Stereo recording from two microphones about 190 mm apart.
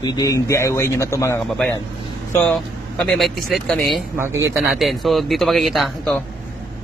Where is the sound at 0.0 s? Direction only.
20° left (ahead or behind).